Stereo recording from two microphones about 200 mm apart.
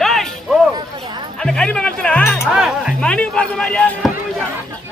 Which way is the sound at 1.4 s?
5° left (ahead or behind).